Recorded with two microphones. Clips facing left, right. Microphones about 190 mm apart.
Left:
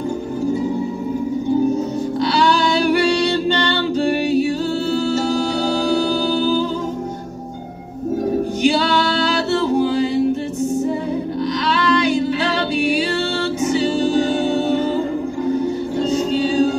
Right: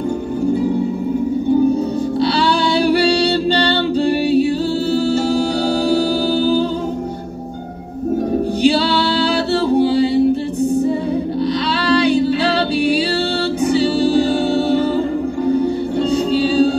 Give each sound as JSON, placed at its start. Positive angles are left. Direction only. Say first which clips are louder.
{"t": 2.1, "sound": "music", "louder": "even", "side_deg": -30}
{"t": 8.6, "sound": "singing", "louder": "right 2 dB", "side_deg": -35}
{"t": 11.8, "sound": "singing", "louder": "right 3 dB", "side_deg": -35}
{"t": 13.7, "sound": "music", "louder": "right 3 dB", "side_deg": -35}
{"t": 16.1, "sound": "music", "louder": "right 2 dB", "side_deg": -35}